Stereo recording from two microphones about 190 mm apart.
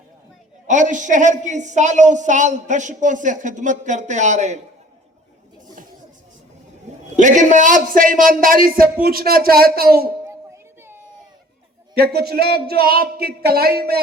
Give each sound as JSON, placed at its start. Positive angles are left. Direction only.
{"t": 0.7, "sound": "a woman's voice", "side_deg": -40}
{"t": 7.2, "sound": "speech", "side_deg": -40}
{"t": 10.2, "sound": "a sound", "side_deg": -15}
{"t": 11.9, "sound": "speech", "side_deg": -55}